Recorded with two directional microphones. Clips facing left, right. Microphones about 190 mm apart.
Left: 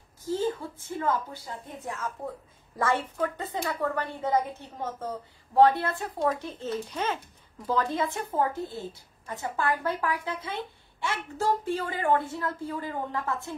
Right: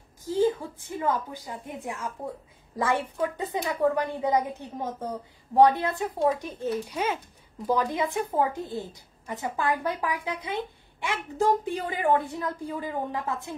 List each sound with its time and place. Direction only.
0.2 s a woman's voice: 15° right (ahead or behind)